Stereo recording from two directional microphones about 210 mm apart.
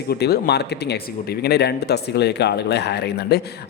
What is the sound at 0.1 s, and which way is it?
Speech, 50° left (ahead or behind).